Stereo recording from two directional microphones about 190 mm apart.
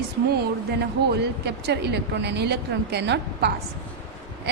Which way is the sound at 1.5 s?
60° right (ahead or behind).